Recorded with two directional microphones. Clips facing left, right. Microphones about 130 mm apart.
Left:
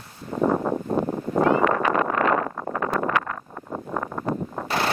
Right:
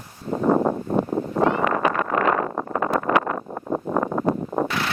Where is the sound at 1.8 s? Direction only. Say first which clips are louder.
Even; 15° right (ahead or behind).